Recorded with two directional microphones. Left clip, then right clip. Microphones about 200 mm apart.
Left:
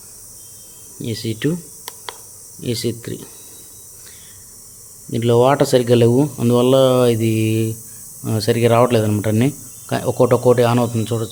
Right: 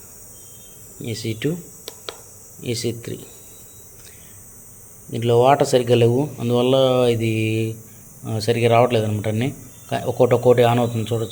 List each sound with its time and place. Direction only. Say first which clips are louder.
1.0 s speech: left 3 dB; 30° left (ahead or behind)
2.6 s speech: left 2 dB; 30° left (ahead or behind)
5.1 s speech: left 1 dB; 35° left (ahead or behind)